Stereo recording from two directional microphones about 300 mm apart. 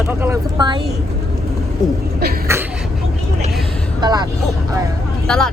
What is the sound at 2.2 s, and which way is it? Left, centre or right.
Speech, right.